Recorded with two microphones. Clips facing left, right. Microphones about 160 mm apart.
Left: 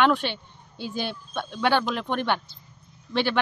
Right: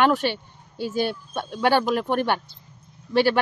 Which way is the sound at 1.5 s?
45° right (ahead or behind).